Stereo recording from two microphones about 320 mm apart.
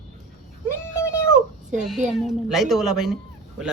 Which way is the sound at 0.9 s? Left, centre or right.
Centre.